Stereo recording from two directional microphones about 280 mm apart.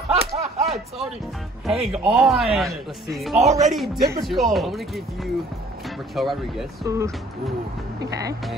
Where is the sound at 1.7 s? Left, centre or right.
Centre.